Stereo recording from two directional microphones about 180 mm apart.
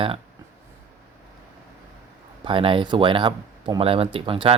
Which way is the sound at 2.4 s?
30° right (ahead or behind).